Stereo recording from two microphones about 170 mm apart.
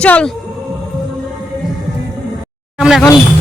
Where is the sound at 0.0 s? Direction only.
5° left (ahead or behind).